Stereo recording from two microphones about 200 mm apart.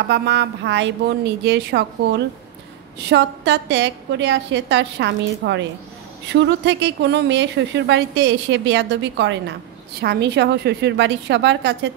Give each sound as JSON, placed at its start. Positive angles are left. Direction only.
{"t": 0.1, "sound": "speech", "side_deg": -60}